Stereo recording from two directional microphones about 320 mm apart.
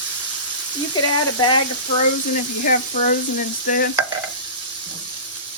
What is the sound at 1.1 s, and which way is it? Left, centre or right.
Speech, centre.